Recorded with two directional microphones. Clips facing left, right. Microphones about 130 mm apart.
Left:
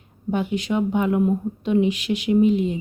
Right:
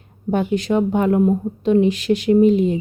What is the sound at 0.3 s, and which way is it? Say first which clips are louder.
A woman's voice: right 4 dB; 40° right (ahead or behind).